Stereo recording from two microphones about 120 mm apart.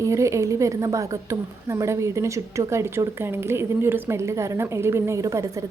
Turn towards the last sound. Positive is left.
turn(degrees=-25)  # may be behind; listen again after turning